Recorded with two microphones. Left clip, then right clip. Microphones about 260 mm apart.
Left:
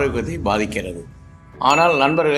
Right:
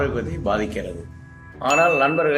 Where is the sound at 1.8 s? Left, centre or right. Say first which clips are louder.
Left 2 dB; left.